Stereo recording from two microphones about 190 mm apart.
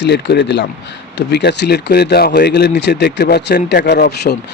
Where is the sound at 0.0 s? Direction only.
65° left (ahead or behind).